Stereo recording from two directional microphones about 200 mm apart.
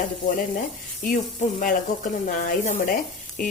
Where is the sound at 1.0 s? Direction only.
40° left (ahead or behind).